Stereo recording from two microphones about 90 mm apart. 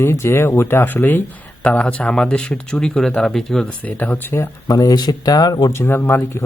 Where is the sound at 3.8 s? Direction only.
20° left (ahead or behind).